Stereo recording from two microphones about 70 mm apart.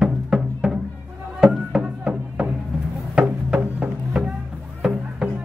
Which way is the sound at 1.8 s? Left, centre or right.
Centre.